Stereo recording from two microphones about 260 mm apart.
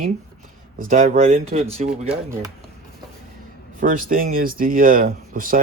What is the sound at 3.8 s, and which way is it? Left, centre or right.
Speech, right.